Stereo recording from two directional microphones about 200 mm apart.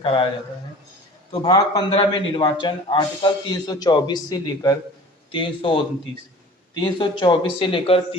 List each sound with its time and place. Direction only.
0.0 s a man's voice: 25° left (ahead or behind)
1.3 s a man's voice: 25° left (ahead or behind)